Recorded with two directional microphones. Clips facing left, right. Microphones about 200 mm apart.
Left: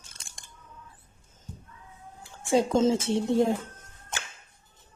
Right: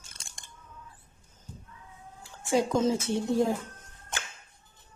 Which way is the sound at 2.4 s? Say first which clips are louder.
Left 3 dB; 25° left (ahead or behind).